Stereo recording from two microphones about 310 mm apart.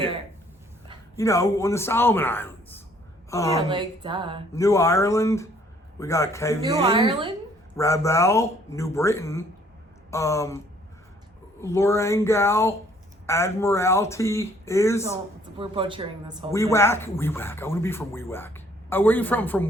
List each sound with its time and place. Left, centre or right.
1.1 s a woman's voice: centre
3.7 s speech: centre
4.5 s speech: centre
6.8 s speech: centre
7.8 s speech: centre
11.6 s speech: centre
15.5 s speech: centre
16.5 s speech: centre